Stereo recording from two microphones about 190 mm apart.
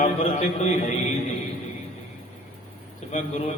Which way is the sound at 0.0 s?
35° left (ahead or behind).